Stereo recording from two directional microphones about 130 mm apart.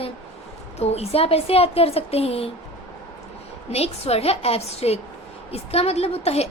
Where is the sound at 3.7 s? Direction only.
50° left (ahead or behind).